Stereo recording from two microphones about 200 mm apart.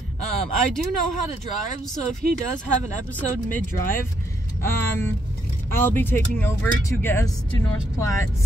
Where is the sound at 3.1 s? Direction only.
10° left (ahead or behind).